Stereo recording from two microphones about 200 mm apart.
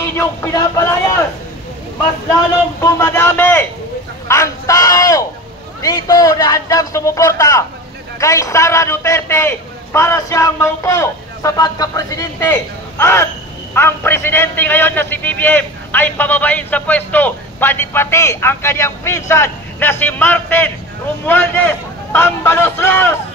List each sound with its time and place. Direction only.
0.4 s a man's voice: 15° left (ahead or behind)
2.8 s a man's voice: 15° left (ahead or behind)